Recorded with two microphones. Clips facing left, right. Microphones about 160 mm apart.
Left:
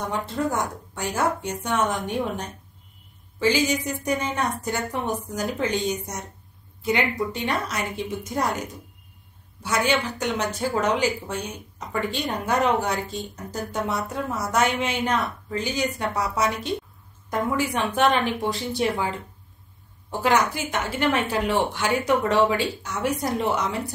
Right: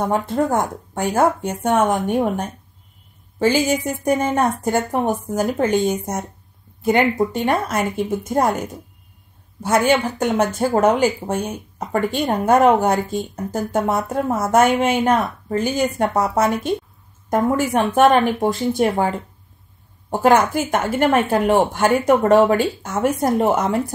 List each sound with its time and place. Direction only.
0.0 s speech: 50° right (ahead or behind)